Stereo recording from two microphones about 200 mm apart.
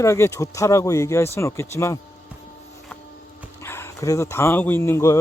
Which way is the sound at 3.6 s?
10° left (ahead or behind).